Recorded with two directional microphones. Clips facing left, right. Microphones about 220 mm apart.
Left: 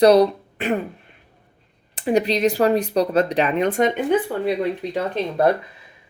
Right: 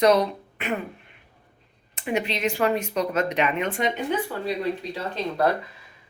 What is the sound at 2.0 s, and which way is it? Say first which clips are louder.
Speech: left 8 dB; 35° left (ahead or behind).